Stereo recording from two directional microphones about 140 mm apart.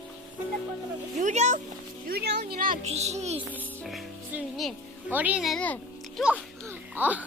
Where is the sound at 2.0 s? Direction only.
90° right.